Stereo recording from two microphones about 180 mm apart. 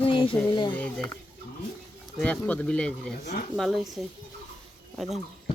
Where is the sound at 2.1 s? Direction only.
5° left (ahead or behind).